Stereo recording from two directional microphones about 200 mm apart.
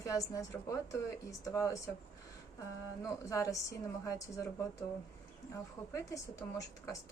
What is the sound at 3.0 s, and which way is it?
A woman's voice, 15° left (ahead or behind).